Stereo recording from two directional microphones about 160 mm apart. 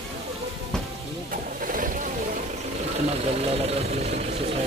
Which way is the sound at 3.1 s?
40° right (ahead or behind).